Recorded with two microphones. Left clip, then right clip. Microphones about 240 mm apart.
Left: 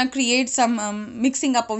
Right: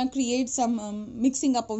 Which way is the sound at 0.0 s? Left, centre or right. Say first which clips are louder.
Left 6 dB; left.